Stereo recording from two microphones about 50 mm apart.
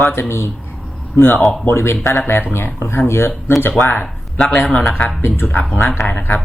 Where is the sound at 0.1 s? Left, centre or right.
Left.